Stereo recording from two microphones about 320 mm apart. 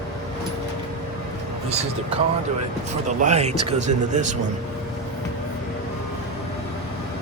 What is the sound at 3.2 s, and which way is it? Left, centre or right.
Speech, right.